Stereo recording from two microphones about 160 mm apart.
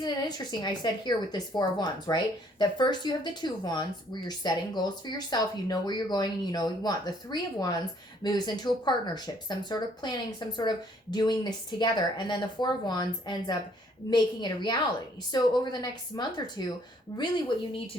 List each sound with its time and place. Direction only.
0.0 s a woman's voice: 25° left (ahead or behind)